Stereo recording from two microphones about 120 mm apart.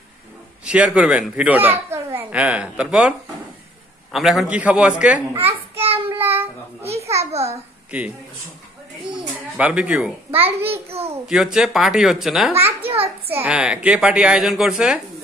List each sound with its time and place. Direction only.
0.7 s speech: 10° right (ahead or behind)
5.5 s a sound: 55° right (ahead or behind)
6.0 s child singing: 15° right (ahead or behind)
7.2 s babbling: 65° right (ahead or behind)
9.6 s speech: 10° right (ahead or behind)
10.7 s a child's voice: 55° right (ahead or behind)
11.2 s speech: 5° right (ahead or behind)
12.8 s a sound: 55° right (ahead or behind)
13.3 s speech: 10° right (ahead or behind)